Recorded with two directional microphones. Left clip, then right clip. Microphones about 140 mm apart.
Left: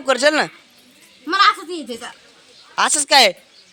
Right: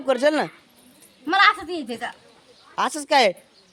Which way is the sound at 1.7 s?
35° right (ahead or behind).